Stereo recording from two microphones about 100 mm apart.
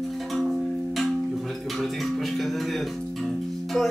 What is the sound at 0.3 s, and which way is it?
Music, centre (ahead or behind).